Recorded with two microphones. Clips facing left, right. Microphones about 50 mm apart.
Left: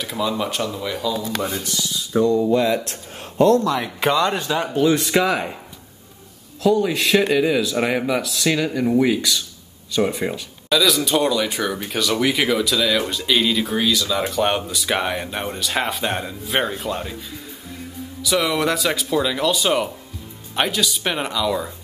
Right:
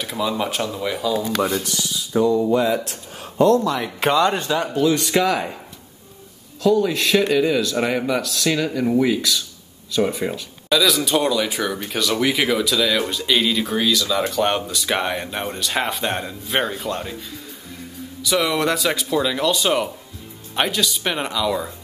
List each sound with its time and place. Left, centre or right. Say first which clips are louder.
0.0 s speech: even; centre
2.6 s speech: even; left
3.6 s a man's voice: even; centre
6.6 s speech: even; centre